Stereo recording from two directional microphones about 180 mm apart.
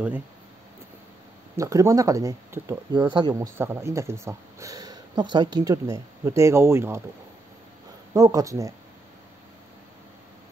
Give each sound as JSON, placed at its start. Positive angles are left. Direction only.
{"t": 1.6, "sound": "speech", "side_deg": -15}
{"t": 3.5, "sound": "speech", "side_deg": -15}
{"t": 8.1, "sound": "speech", "side_deg": -20}